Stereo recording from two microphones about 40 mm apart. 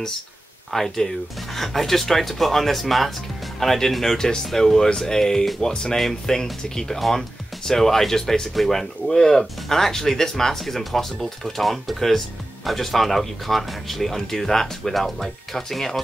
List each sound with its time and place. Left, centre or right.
0.7 s speech: centre